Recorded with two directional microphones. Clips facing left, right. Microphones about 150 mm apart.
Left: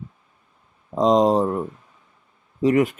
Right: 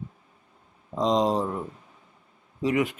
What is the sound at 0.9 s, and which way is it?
Speech, 45° left (ahead or behind).